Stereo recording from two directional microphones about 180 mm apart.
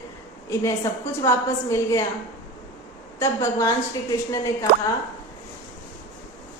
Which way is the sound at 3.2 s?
15° left (ahead or behind).